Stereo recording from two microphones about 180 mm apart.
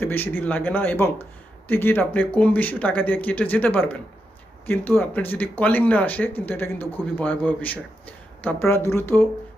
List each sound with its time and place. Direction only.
0.0 s speech: 10° left (ahead or behind)